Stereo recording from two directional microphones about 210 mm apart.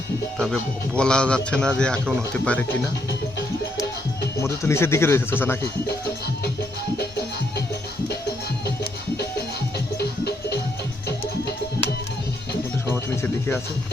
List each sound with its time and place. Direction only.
0.3 s a man's voice: 5° left (ahead or behind)
4.4 s speech: 15° left (ahead or behind)
9.7 s music: 50° left (ahead or behind)
12.9 s music: 10° left (ahead or behind)